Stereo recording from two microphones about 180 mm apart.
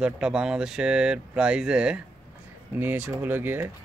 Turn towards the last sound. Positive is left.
turn(degrees=-10)  # may be behind; listen again after turning